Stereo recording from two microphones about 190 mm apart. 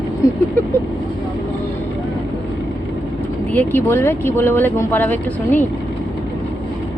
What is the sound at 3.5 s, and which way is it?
Speech, 10° left (ahead or behind).